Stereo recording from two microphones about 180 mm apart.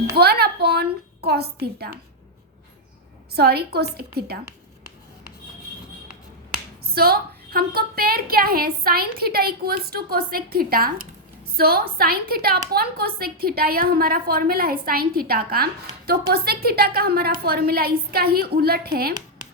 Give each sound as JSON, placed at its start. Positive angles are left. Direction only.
{"t": 0.2, "sound": "a woman's voice", "side_deg": -60}
{"t": 3.3, "sound": "a woman's voice", "side_deg": -60}
{"t": 6.8, "sound": "a woman's voice", "side_deg": -60}